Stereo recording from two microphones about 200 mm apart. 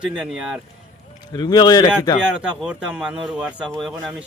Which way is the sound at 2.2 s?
5° right (ahead or behind).